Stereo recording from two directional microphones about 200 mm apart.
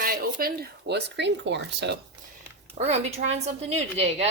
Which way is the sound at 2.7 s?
35° right (ahead or behind).